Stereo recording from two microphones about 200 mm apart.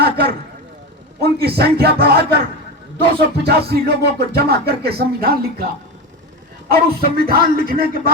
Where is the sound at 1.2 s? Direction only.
50° right (ahead or behind).